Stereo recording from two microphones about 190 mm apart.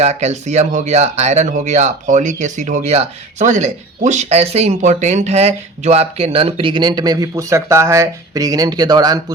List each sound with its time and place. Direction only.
0.0 s speech: 35° right (ahead or behind); by 9.2 s 20° right (ahead or behind)